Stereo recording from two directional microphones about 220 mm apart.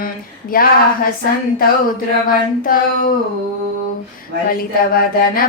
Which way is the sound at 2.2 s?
40° left (ahead or behind).